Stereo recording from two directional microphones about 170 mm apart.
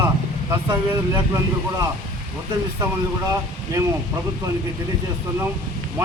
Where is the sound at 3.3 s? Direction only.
20° right (ahead or behind).